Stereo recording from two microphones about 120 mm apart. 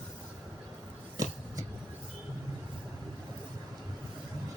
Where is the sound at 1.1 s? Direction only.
30° right (ahead or behind).